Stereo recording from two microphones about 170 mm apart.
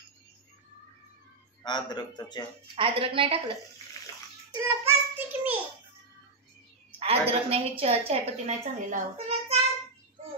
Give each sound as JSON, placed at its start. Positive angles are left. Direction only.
{"t": 1.6, "sound": "speech", "side_deg": 25}
{"t": 2.7, "sound": "a woman's voice", "side_deg": -30}
{"t": 4.5, "sound": "child singing", "side_deg": -15}
{"t": 7.0, "sound": "a woman's voice", "side_deg": -35}